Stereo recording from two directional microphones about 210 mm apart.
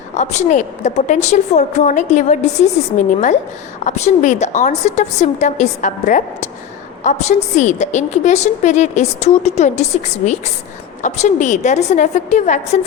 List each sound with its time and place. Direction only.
0.2 s a woman's voice: 35° left (ahead or behind)